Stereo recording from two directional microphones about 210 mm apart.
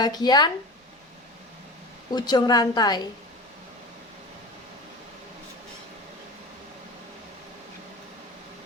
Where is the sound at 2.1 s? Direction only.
20° left (ahead or behind).